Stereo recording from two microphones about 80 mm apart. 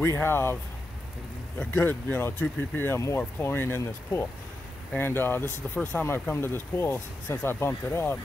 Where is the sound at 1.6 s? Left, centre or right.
Left.